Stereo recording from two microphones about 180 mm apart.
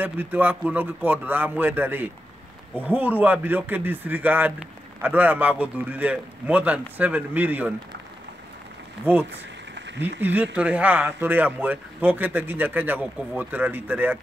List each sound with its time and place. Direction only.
0.0 s speech: 10° right (ahead or behind)
9.8 s a sound: 80° right
10.2 s speech: 10° right (ahead or behind)